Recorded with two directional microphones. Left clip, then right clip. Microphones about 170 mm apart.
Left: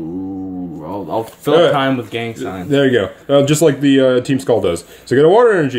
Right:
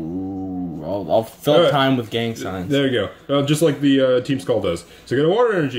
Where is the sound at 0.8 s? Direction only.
30° right (ahead or behind).